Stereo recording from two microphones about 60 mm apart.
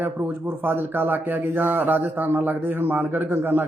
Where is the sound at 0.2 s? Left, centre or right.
Right.